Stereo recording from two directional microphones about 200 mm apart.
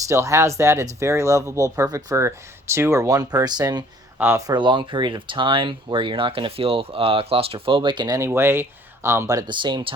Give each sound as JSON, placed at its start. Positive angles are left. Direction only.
{"t": 0.1, "sound": "speech", "side_deg": -15}